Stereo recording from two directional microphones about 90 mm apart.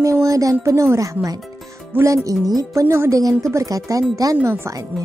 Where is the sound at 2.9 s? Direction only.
30° right (ahead or behind).